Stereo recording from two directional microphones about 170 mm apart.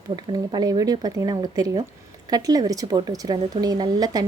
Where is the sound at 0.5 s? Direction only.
25° right (ahead or behind).